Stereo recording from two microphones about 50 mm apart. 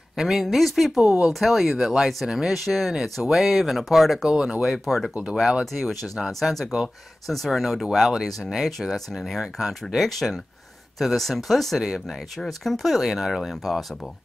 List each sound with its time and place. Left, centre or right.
0.2 s speech: centre
4.3 s speech: centre
4.6 s speech: centre
6.1 s speech: centre
7.2 s speech: centre